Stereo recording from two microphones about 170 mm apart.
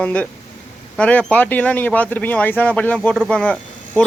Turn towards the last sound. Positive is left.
turn(degrees=5)  # may be behind; listen again after turning